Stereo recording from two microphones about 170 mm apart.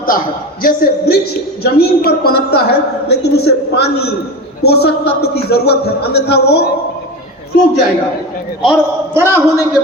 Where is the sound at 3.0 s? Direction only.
80° left.